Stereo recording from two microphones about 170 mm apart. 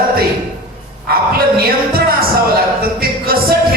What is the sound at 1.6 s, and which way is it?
Music, 65° right (ahead or behind).